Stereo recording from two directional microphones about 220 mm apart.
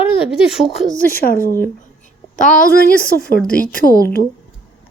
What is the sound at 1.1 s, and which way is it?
A woman's voice, 40° left (ahead or behind).